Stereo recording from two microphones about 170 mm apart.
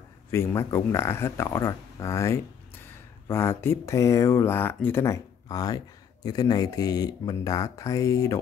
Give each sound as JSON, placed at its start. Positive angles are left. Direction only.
{"t": 0.3, "sound": "speech", "side_deg": 15}